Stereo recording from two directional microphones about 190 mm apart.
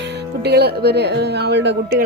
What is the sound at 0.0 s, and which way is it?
Speech, 65° right (ahead or behind).